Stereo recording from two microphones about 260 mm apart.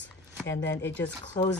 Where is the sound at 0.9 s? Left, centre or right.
Centre.